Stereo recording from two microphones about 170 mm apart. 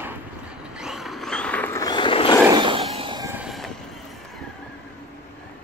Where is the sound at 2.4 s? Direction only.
25° right (ahead or behind).